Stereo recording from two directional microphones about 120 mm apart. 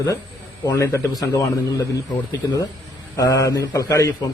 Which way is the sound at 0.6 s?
25° left (ahead or behind).